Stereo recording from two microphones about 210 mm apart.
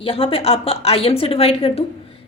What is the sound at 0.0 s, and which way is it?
A woman's voice, 25° left (ahead or behind).